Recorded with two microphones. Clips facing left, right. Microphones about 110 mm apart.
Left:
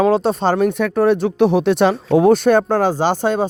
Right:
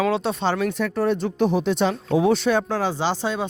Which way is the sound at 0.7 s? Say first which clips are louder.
Left 7 dB; 60° left (ahead or behind).